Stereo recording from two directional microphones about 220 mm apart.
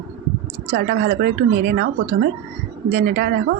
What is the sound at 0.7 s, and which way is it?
A woman's voice, 50° right (ahead or behind).